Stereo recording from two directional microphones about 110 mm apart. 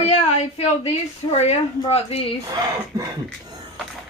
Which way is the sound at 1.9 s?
70° left (ahead or behind).